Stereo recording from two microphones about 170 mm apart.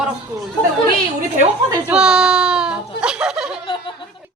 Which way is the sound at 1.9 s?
5° right (ahead or behind).